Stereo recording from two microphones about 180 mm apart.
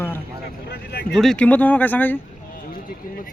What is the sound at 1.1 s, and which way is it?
Speech, 5° left (ahead or behind).